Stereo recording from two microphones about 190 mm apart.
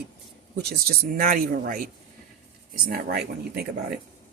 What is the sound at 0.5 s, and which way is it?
Speech, 55° right (ahead or behind).